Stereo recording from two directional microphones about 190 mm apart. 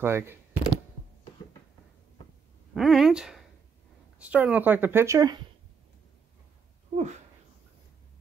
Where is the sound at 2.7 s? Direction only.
Centre (ahead or behind).